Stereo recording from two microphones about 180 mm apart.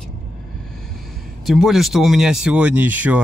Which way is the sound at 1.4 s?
Centre (ahead or behind).